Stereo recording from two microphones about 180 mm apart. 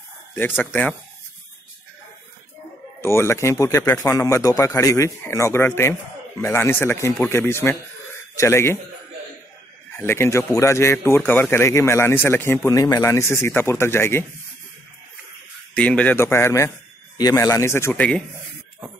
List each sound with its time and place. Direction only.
3.0 s speech: 15° left (ahead or behind)
9.9 s speech: 15° left (ahead or behind)
15.7 s speech: 5° left (ahead or behind)